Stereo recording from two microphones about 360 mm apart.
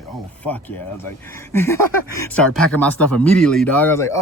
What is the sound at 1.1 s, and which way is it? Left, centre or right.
Speech, centre.